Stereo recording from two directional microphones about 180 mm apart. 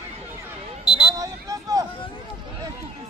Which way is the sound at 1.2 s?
20° right (ahead or behind).